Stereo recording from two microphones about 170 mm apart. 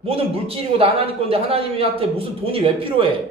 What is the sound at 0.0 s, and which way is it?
A man's voice, 35° right (ahead or behind).